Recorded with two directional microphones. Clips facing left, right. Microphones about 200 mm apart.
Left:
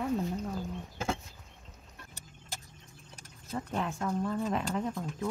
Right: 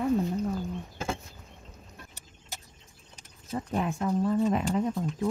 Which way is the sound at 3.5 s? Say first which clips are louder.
Right 4 dB; 15° right (ahead or behind).